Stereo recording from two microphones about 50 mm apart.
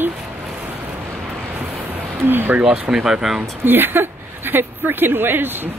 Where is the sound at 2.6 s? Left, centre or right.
Right.